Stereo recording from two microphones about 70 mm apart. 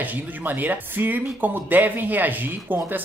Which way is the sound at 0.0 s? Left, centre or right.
Right.